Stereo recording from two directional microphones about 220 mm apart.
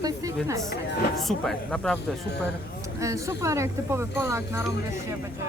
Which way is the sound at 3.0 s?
15° right (ahead or behind).